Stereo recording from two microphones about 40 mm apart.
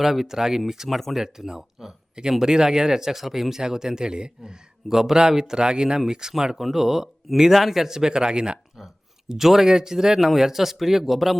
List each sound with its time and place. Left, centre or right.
0.0 s speech: centre
0.9 s speech: centre
1.2 s speech: centre
4.9 s speech: centre
9.3 s speech: centre